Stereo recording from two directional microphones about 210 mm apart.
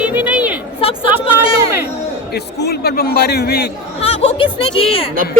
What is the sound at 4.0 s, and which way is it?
Speech, 30° left (ahead or behind).